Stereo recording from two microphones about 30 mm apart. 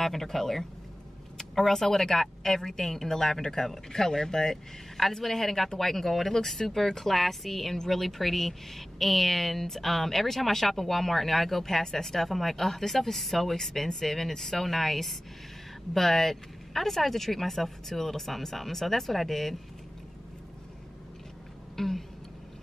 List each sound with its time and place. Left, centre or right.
0.0 s a woman's voice: centre
4.9 s a woman's voice: centre
21.7 s a sound: centre